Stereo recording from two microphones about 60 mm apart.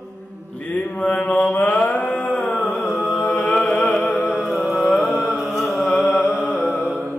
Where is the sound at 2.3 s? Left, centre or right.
Left.